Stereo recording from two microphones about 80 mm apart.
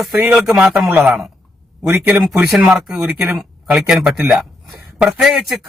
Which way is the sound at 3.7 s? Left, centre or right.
Centre.